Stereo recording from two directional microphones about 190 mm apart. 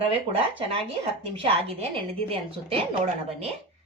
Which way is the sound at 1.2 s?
30° right (ahead or behind).